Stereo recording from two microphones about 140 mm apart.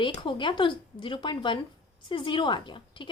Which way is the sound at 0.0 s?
35° left (ahead or behind).